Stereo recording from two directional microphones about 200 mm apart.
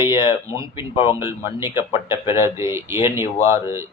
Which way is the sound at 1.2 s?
15° right (ahead or behind).